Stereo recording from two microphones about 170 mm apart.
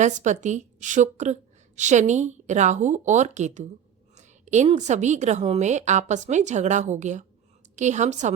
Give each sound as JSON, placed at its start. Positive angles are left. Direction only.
{"t": 0.0, "sound": "a woman's voice", "side_deg": -45}